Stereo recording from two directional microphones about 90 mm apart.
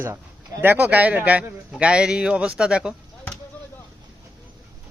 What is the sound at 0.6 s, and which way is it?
Speech, 20° right (ahead or behind).